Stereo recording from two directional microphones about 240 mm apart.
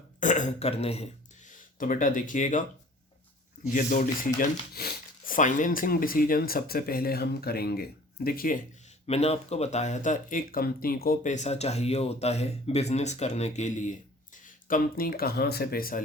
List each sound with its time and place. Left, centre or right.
0.2 s speech: left
9.0 s speech: left